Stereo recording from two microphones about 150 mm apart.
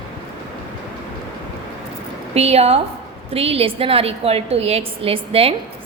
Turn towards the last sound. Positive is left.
turn(degrees=-40)  # may be behind; listen again after turning